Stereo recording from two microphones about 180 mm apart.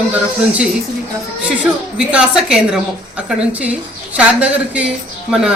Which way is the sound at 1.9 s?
5° right (ahead or behind).